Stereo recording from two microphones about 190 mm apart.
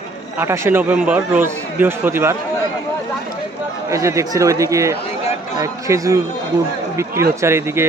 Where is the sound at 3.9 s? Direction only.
15° right (ahead or behind).